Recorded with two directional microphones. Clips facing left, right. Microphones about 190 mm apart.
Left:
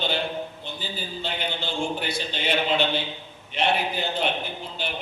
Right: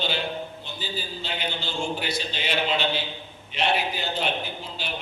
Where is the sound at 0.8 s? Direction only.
55° left (ahead or behind).